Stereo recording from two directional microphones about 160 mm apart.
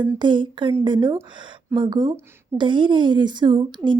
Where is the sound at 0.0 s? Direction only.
30° right (ahead or behind).